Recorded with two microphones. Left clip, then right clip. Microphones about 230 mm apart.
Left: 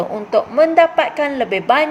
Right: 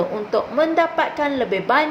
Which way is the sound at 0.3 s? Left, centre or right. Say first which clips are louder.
Left 6 dB; left.